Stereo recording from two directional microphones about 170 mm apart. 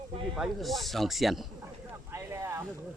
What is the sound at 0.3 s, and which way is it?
Speech, centre (ahead or behind).